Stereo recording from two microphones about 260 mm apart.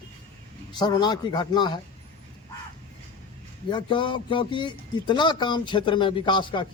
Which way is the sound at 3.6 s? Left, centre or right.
Centre.